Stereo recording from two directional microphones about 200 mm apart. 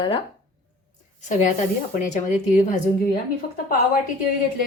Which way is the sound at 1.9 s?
40° left (ahead or behind).